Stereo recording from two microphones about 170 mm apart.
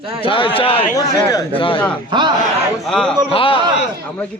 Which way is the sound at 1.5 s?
30° left (ahead or behind).